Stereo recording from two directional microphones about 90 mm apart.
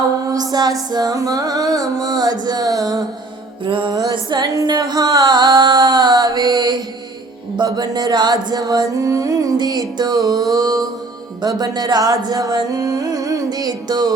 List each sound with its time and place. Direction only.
0.3 s music: 50° right (ahead or behind)
3.7 s music: 70° right (ahead or behind)
3.9 s music: 55° right (ahead or behind)
4.6 s a sound: 50° right (ahead or behind)
7.5 s music: 55° right (ahead or behind)